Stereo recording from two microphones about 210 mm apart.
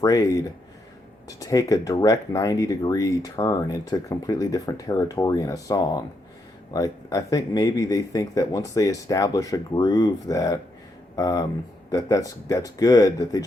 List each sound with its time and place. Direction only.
0.0 s speech: 15° left (ahead or behind)